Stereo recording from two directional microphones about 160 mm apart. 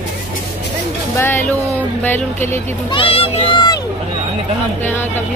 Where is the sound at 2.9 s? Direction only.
35° left (ahead or behind).